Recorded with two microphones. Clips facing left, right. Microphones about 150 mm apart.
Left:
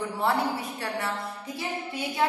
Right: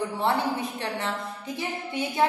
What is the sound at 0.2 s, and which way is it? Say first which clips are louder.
Speech: even; 20° right (ahead or behind).